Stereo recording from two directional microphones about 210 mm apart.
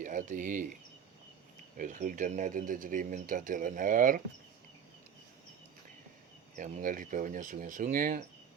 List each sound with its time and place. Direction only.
0.0 s speech: 40° right (ahead or behind)
1.8 s speech: 40° right (ahead or behind)
6.6 s speech: 40° right (ahead or behind)